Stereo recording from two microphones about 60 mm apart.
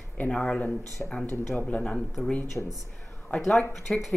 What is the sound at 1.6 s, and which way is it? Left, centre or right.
Speech, left.